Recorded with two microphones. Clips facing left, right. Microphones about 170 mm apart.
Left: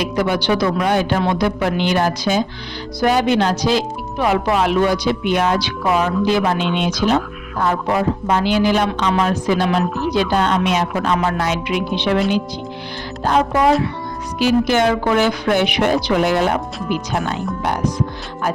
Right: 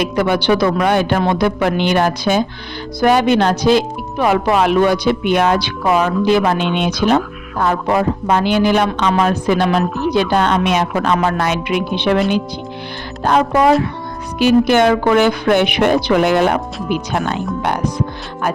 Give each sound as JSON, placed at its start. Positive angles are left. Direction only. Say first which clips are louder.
{"t": 0.0, "sound": "speech", "louder": "right 3 dB", "side_deg": -60}
{"t": 13.2, "sound": "speech", "louder": "right 2 dB", "side_deg": -60}